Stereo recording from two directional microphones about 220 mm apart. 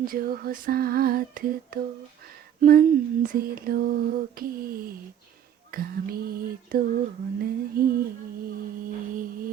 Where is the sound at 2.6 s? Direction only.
40° right (ahead or behind).